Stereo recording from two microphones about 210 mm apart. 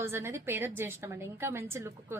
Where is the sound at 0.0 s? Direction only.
10° right (ahead or behind).